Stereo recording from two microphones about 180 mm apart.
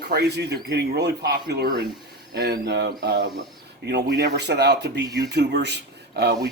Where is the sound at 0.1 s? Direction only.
65° right (ahead or behind).